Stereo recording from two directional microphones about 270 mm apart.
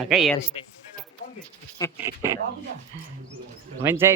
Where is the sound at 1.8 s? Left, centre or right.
Centre.